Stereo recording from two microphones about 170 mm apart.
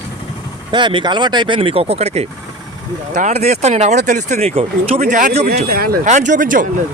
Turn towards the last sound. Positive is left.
turn(degrees=-50)  # may be behind; listen again after turning